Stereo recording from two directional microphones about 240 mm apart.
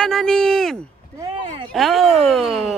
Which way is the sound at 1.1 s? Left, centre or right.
Centre.